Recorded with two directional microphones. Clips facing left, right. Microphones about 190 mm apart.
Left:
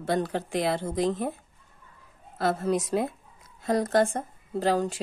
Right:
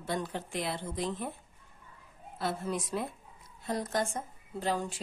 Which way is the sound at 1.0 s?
40° left (ahead or behind).